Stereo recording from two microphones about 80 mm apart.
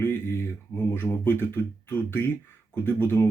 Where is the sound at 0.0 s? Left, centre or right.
Left.